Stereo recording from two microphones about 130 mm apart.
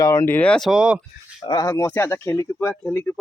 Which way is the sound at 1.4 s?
30° left (ahead or behind).